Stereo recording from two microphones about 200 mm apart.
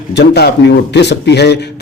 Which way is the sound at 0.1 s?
55° left (ahead or behind).